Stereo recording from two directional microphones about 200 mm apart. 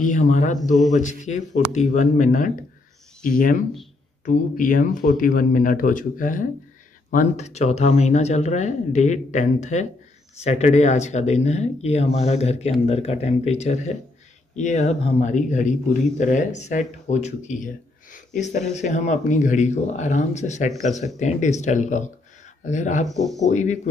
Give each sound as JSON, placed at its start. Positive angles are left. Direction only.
{"t": 0.0, "sound": "a man's voice", "side_deg": 40}
{"t": 18.1, "sound": "a sound", "side_deg": 40}
{"t": 18.7, "sound": "a man's voice", "side_deg": 35}